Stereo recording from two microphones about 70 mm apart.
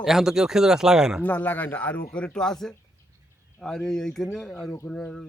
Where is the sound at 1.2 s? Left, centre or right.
Left.